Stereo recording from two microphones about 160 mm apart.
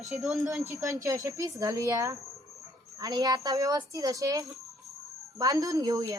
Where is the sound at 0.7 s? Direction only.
20° right (ahead or behind).